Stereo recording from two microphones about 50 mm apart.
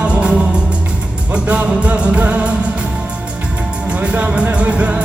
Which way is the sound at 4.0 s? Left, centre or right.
Right.